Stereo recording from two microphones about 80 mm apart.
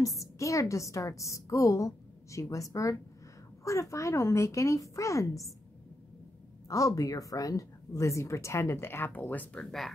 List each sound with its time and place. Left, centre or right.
0.0 s a woman's voice: left
6.7 s a woman's voice: left; by 9.7 s centre
9.7 s speech: centre